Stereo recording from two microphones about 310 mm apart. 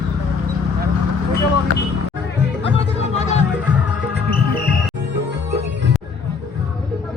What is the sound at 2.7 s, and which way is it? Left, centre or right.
Music, left.